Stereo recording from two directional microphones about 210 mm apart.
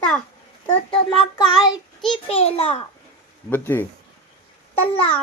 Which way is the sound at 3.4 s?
10° left (ahead or behind).